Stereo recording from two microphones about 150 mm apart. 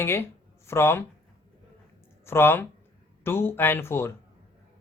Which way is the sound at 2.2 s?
15° left (ahead or behind).